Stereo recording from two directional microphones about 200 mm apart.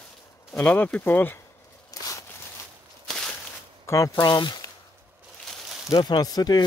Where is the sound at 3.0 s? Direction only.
5° left (ahead or behind).